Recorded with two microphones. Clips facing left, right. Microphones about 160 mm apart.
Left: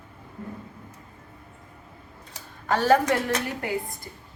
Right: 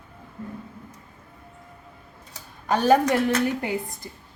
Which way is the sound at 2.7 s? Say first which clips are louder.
Right 1 dB; 15° right (ahead or behind).